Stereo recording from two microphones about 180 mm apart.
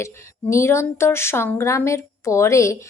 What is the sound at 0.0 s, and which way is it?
A woman's voice, 15° left (ahead or behind).